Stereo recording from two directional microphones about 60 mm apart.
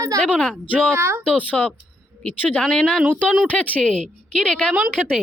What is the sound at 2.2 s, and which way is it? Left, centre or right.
Speech, left.